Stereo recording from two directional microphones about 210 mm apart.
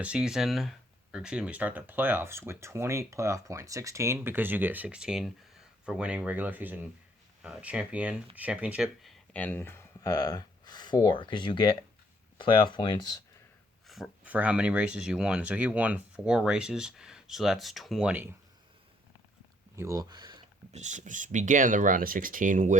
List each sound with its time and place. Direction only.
0.0 s speech: 5° right (ahead or behind)
9.3 s speech: 10° left (ahead or behind)
13.8 s speech: centre (ahead or behind)
19.7 s speech: 15° right (ahead or behind)
20.7 s speech: 35° right (ahead or behind)